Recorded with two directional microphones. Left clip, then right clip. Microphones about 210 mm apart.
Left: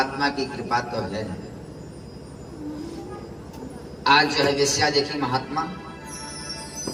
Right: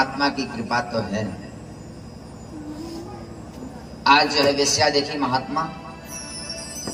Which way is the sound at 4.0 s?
30° right (ahead or behind).